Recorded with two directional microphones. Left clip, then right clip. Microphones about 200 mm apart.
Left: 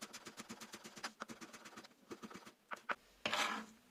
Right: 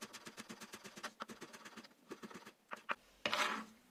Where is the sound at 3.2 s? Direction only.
5° right (ahead or behind).